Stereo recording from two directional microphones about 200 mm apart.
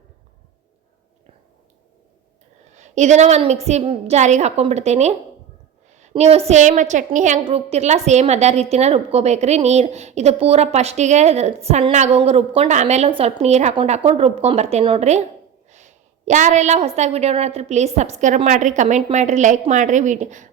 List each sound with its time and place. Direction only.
2.7 s a woman's voice: 35° right (ahead or behind)